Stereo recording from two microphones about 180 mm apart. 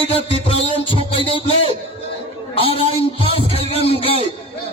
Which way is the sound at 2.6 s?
30° left (ahead or behind).